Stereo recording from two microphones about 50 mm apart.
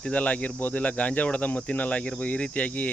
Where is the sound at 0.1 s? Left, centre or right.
Left.